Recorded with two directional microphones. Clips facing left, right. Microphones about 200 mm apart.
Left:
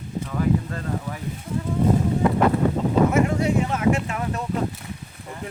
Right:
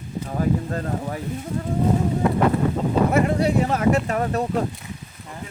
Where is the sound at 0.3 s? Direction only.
40° right (ahead or behind).